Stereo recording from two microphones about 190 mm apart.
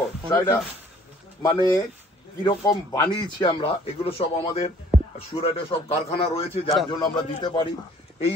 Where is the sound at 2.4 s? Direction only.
20° left (ahead or behind).